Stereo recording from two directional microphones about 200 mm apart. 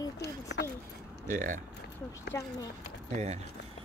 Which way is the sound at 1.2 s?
40° right (ahead or behind).